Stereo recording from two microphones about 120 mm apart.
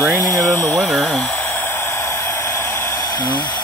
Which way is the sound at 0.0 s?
25° right (ahead or behind).